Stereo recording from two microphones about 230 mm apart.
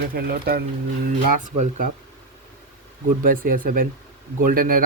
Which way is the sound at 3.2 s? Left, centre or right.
Right.